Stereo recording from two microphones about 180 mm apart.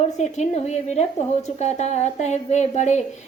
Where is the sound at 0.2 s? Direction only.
40° left (ahead or behind).